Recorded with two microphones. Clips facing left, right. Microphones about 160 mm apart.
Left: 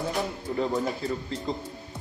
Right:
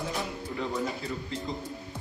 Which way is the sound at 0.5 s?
35° left (ahead or behind).